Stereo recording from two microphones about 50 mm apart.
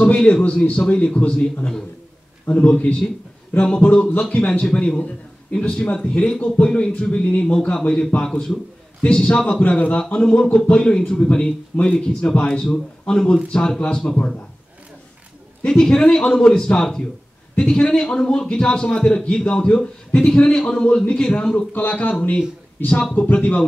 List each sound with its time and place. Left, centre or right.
0.0 s a man's voice: centre
2.5 s a man's voice: left
9.6 s a man's voice: left; by 14.1 s centre
14.1 s a man's voice: left
15.6 s a man's voice: centre
21.7 s speech: left
23.1 s speech: left